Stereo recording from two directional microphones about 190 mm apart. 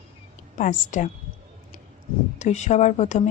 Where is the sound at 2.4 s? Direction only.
40° left (ahead or behind).